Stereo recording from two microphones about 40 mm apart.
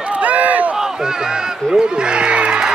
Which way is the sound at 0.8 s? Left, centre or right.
Centre.